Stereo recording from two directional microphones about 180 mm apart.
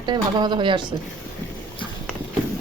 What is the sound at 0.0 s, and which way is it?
Speech, 25° right (ahead or behind).